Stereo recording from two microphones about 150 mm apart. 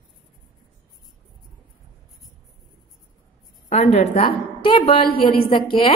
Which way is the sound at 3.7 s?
45° left (ahead or behind).